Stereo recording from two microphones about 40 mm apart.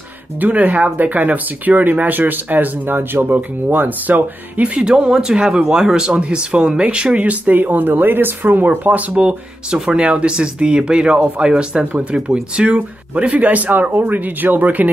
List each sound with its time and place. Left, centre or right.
0.4 s speech: right
3.7 s speech: right
4.8 s speech: centre
6.1 s speech: right
7.5 s speech: right
9.1 s speech: right